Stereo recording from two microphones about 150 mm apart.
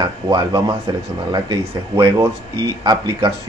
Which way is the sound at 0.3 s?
25° right (ahead or behind).